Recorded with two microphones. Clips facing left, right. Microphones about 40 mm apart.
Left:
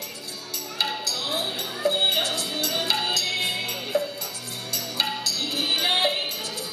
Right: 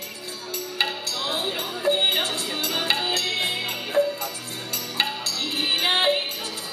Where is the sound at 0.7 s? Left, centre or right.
Right.